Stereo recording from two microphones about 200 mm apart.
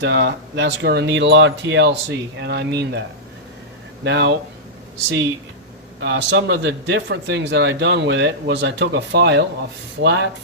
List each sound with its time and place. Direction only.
0.0 s speech: 60° right (ahead or behind)
4.0 s speech: 60° right (ahead or behind)
6.0 s speech: 60° right (ahead or behind)